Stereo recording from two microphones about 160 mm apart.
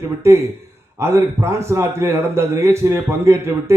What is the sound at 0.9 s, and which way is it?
A man's voice, 15° right (ahead or behind).